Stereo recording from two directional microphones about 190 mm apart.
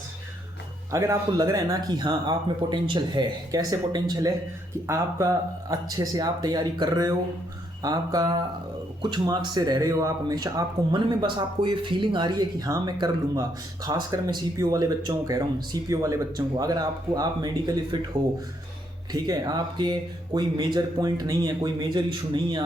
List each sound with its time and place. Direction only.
0.9 s speech: 15° right (ahead or behind)
19.1 s speech: 20° right (ahead or behind)